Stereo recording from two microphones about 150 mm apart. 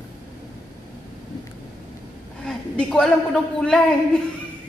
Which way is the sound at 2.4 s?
5° left (ahead or behind).